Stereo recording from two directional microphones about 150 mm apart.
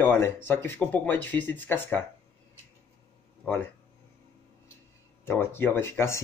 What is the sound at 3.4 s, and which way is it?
Speech, 10° left (ahead or behind).